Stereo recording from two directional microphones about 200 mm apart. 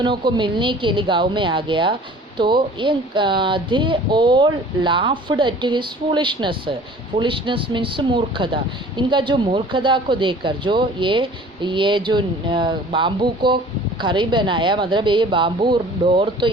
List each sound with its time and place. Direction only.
0.0 s speech: 25° right (ahead or behind)